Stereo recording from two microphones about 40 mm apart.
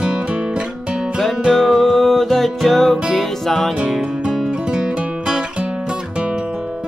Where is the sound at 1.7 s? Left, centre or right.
Centre.